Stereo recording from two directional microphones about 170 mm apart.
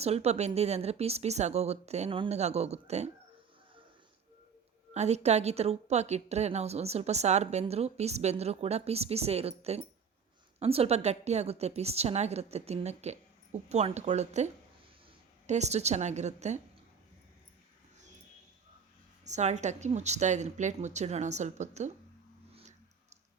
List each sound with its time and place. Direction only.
0.0 s a woman's voice: 40° right (ahead or behind)
4.9 s a woman's voice: 40° right (ahead or behind)
19.2 s a woman's voice: 45° right (ahead or behind)
22.5 s a sound: 40° right (ahead or behind)